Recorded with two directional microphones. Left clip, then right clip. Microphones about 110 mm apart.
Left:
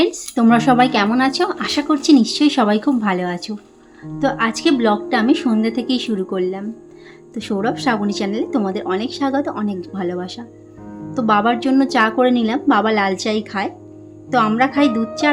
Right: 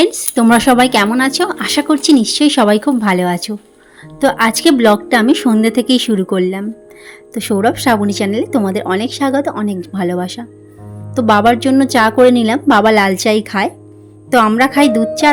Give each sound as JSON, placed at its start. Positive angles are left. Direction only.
{"t": 0.0, "sound": "a woman's voice", "side_deg": -45}
{"t": 1.1, "sound": "speech", "side_deg": -35}
{"t": 4.2, "sound": "speech", "side_deg": -75}
{"t": 7.3, "sound": "a woman's voice", "side_deg": -60}